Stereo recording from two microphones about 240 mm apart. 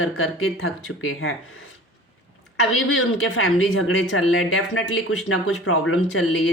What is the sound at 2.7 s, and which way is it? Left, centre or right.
Speech, left.